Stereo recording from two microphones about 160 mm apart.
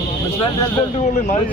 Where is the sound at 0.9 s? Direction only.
45° left (ahead or behind).